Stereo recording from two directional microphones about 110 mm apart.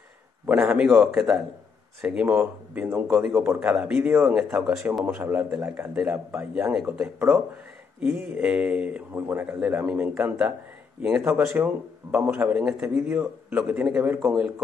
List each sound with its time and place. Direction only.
0.6 s a man's voice: 5° right (ahead or behind)
3.6 s a man's voice: 5° right (ahead or behind)